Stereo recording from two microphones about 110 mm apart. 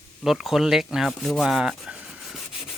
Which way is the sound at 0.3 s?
5° right (ahead or behind).